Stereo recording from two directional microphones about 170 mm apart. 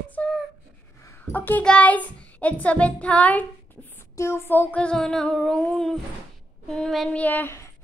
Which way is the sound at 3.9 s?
15° left (ahead or behind).